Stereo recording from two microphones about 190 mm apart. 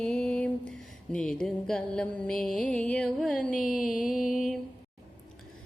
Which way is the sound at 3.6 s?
45° left (ahead or behind).